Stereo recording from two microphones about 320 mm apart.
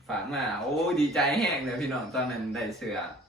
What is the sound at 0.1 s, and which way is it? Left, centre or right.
Speech, centre.